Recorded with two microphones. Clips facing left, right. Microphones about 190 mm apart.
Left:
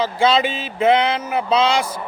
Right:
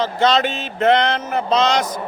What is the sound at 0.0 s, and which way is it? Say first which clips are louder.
A man's voice: even; 10° left (ahead or behind).